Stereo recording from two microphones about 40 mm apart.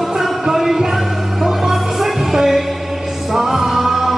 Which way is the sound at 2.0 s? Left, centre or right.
Centre.